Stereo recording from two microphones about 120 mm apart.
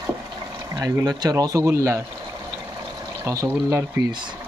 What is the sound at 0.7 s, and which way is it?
Speech, 30° right (ahead or behind).